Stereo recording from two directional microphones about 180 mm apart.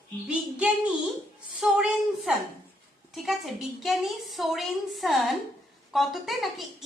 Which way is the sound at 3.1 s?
Centre (ahead or behind).